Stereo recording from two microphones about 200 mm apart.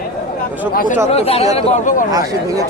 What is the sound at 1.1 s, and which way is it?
Speech, 30° left (ahead or behind).